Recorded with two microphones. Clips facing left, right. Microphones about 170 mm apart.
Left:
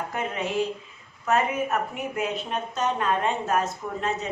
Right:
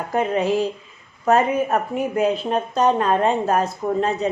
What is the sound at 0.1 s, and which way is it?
Speech, 35° right (ahead or behind).